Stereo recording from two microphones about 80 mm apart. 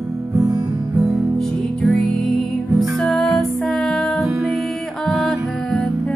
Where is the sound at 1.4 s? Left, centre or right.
Centre.